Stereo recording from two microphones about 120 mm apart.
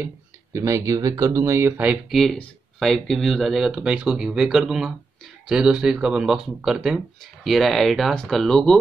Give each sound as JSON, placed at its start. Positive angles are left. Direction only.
{"t": 0.0, "sound": "speech", "side_deg": -25}
{"t": 2.0, "sound": "speech", "side_deg": 0}